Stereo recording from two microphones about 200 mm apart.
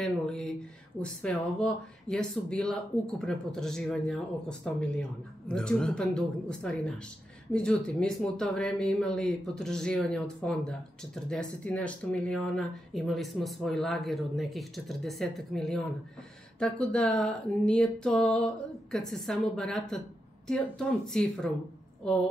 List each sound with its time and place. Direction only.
0.0 s speech: centre (ahead or behind)